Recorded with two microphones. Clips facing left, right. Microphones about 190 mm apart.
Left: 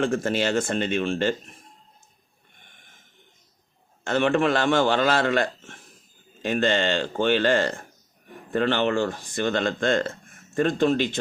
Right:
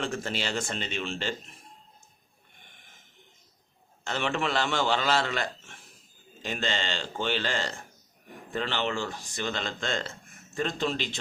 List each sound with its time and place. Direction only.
0.0 s speech: 50° left (ahead or behind)
4.0 s speech: 55° left (ahead or behind)